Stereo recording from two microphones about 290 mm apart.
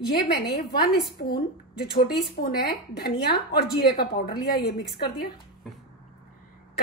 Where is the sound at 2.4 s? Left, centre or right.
Left.